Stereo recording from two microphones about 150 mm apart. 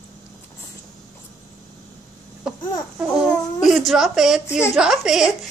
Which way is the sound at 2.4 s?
5° right (ahead or behind).